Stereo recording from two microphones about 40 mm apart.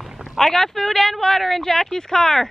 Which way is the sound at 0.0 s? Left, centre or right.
Centre.